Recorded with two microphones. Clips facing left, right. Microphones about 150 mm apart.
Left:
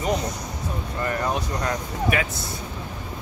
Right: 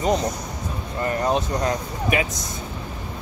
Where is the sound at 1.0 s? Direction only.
25° right (ahead or behind).